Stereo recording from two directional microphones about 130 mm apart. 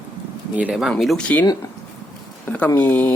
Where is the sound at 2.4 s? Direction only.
10° left (ahead or behind).